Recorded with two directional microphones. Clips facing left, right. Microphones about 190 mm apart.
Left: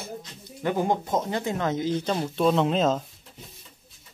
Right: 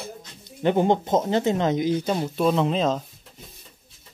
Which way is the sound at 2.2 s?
5° right (ahead or behind).